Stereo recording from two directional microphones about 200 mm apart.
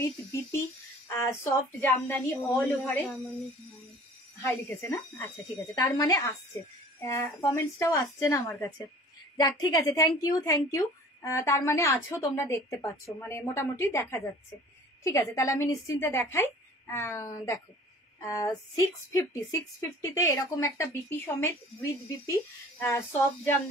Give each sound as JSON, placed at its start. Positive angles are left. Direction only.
{"t": 0.0, "sound": "a woman's voice", "side_deg": 15}
{"t": 4.4, "sound": "a woman's voice", "side_deg": 15}
{"t": 15.3, "sound": "a woman's voice", "side_deg": 15}
{"t": 20.2, "sound": "a woman's voice", "side_deg": 15}